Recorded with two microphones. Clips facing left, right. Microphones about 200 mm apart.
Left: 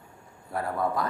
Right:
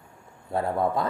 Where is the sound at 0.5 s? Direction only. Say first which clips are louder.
Right 3 dB; 25° right (ahead or behind).